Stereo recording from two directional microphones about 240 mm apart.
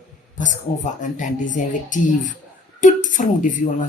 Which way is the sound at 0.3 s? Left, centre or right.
Left.